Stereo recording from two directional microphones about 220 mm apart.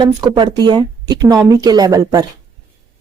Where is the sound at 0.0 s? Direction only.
20° right (ahead or behind).